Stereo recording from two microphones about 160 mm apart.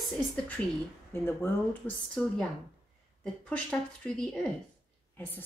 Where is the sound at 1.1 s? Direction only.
15° left (ahead or behind).